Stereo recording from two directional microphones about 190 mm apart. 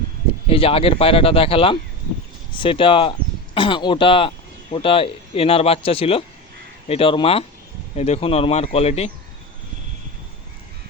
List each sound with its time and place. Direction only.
0.4 s speech: 30° left (ahead or behind)